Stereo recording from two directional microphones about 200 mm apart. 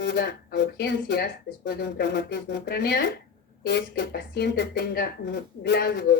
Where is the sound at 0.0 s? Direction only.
55° left (ahead or behind).